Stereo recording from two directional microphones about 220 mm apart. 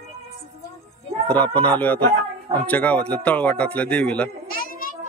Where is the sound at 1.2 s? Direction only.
5° left (ahead or behind).